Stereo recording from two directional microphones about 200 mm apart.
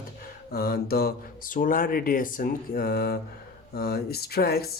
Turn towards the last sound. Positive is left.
turn(degrees=50)  # may be behind; listen again after turning